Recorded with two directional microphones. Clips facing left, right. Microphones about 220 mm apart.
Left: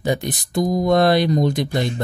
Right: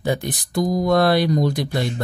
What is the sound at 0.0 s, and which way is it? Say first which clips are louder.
Speech: left 1 dB; 20° left (ahead or behind).